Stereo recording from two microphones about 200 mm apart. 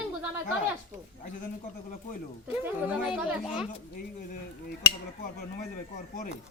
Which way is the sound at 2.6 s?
5° right (ahead or behind).